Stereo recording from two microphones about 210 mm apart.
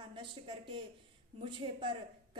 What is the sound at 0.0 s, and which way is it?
A woman's voice, 25° right (ahead or behind).